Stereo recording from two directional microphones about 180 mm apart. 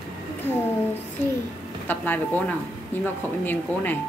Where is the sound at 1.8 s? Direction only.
10° left (ahead or behind).